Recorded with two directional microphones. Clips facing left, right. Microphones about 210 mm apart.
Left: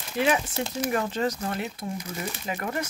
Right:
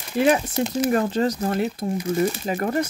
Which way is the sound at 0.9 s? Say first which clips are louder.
Right 6 dB; 35° right (ahead or behind).